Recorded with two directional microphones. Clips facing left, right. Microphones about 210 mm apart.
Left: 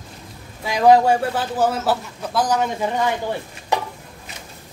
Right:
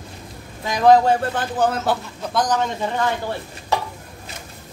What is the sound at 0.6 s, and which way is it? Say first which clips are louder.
A man's voice: even; 10° left (ahead or behind).